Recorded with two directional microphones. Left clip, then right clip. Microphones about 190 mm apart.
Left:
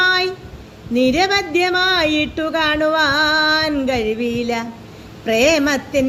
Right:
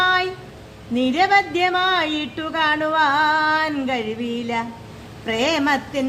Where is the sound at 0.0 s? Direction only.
10° left (ahead or behind).